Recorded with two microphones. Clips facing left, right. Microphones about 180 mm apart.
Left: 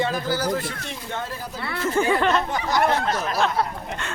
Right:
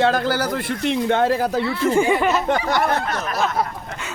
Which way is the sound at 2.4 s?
75° right (ahead or behind).